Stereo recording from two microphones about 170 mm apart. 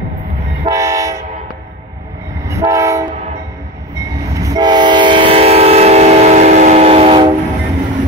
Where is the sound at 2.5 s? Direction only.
20° right (ahead or behind).